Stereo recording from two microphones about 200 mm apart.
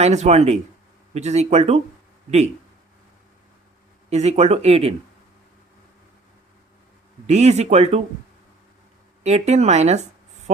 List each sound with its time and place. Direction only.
0.0 s speech: 35° right (ahead or behind)
4.1 s speech: 30° right (ahead or behind)
7.3 s speech: 35° right (ahead or behind)
9.2 s speech: 35° right (ahead or behind)